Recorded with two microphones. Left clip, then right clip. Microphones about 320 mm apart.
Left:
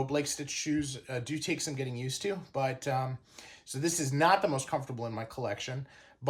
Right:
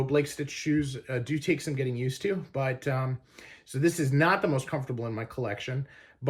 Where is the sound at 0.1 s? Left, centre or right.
Centre.